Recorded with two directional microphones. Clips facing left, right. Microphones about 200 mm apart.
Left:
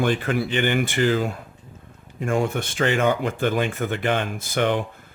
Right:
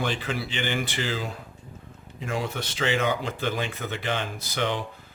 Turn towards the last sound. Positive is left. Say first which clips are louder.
# left 6 dB
turn(degrees=50)  # may be behind; listen again after turning